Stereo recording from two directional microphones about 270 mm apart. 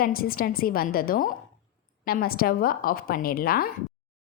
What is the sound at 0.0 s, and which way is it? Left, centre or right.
Speech, left.